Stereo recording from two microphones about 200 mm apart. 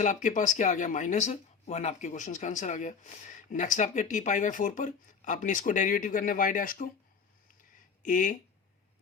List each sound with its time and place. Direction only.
0.0 s speech: 40° left (ahead or behind)
8.0 s speech: 40° left (ahead or behind)